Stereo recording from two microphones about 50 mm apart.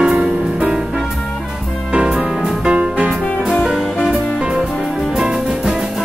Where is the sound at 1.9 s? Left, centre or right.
Centre.